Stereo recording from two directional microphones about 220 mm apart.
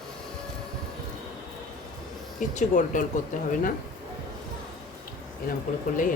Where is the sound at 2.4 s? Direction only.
35° left (ahead or behind).